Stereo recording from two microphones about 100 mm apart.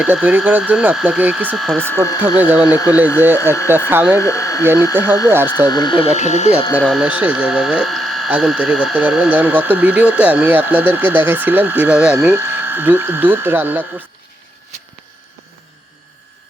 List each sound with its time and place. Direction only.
0.0 s speech: 15° right (ahead or behind)
1.5 s speech: centre (ahead or behind)
1.8 s speech: 20° left (ahead or behind)
2.4 s speech: 15° right (ahead or behind)
2.6 s speech: 35° left (ahead or behind)
3.2 s speech: 20° right (ahead or behind)
4.2 s speech: 30° left (ahead or behind)
6.0 s speech: 90° left
6.8 s speech: 10° right (ahead or behind)
7.9 s a sound: centre (ahead or behind)
8.3 s speech: 10° right (ahead or behind)
12.1 s speech: 25° right (ahead or behind)